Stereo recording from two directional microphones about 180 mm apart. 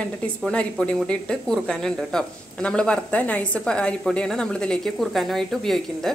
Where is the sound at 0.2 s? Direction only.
5° left (ahead or behind).